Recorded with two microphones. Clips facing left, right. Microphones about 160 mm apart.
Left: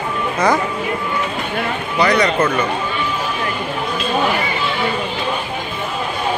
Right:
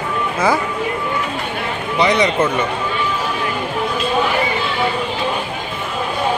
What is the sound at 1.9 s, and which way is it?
Speech, 20° right (ahead or behind).